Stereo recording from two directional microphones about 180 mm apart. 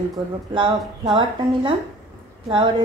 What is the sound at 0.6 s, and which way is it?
A woman's voice, 30° right (ahead or behind).